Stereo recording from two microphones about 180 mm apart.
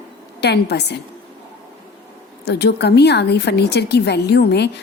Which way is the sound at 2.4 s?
65° left (ahead or behind).